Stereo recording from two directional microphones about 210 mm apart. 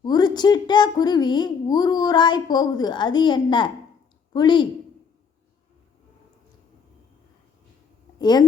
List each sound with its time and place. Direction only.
0.0 s a woman's voice: 20° left (ahead or behind)
8.2 s speech: 20° left (ahead or behind)